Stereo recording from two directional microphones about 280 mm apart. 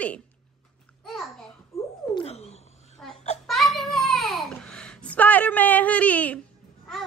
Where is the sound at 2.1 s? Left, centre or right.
Left.